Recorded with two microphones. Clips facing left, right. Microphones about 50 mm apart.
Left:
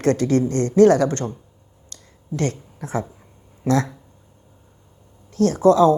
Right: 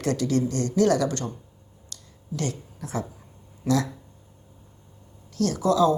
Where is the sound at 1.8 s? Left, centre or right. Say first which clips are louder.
Left 3 dB; left.